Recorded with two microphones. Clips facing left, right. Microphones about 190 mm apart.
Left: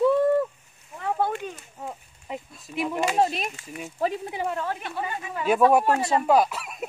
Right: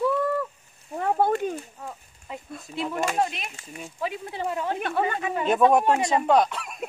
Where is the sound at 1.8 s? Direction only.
20° left (ahead or behind).